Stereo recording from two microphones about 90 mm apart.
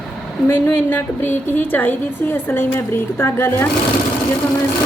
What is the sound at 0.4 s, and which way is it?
A woman's voice, 25° left (ahead or behind).